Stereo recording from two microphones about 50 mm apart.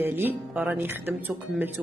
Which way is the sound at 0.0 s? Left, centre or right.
Right.